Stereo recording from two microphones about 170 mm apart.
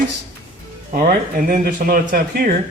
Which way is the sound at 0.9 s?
55° right (ahead or behind).